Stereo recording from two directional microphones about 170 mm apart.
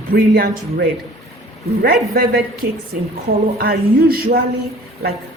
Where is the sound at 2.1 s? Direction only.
65° right (ahead or behind).